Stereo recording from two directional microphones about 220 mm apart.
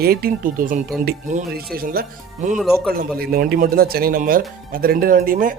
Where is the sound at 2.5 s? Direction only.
Centre (ahead or behind).